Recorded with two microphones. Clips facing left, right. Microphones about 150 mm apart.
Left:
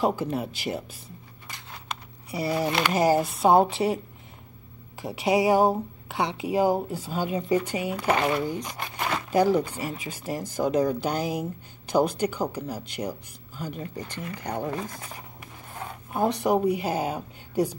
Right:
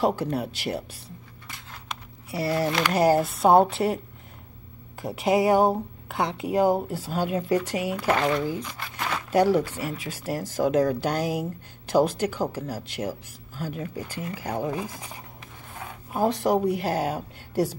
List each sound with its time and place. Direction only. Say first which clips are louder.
0.0 s speech: right 1 dB; centre (ahead or behind)
2.3 s speech: right 1 dB; centre (ahead or behind)
5.0 s speech: right 1 dB; centre (ahead or behind)
8.1 s speech: even; 10° left (ahead or behind)
9.3 s speech: right 1 dB; centre (ahead or behind)